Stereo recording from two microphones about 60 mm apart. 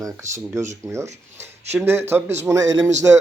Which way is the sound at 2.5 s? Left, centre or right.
Right.